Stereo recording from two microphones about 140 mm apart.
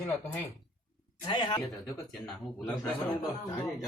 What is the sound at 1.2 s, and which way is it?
Speech, 35° left (ahead or behind).